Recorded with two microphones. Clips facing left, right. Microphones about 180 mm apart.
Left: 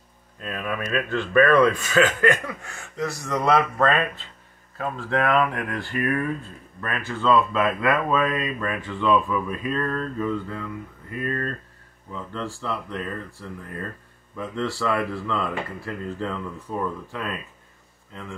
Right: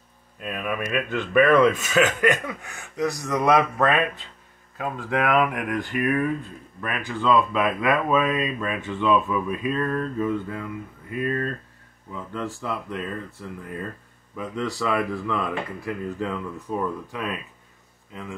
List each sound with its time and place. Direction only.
0.4 s speech: 15° right (ahead or behind)
2.0 s a sound: 20° right (ahead or behind)
2.6 s speech: 15° right (ahead or behind)